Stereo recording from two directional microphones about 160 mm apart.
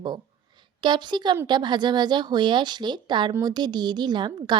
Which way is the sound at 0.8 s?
30° right (ahead or behind).